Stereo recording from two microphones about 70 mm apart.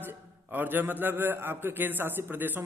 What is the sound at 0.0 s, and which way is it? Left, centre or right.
A man's voice, right.